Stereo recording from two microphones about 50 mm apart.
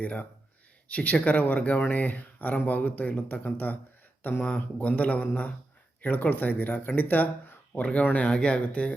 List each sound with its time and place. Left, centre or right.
0.0 s speech: left
7.7 s speech: left